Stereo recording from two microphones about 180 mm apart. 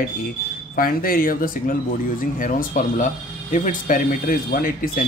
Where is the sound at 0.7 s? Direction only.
50° left (ahead or behind).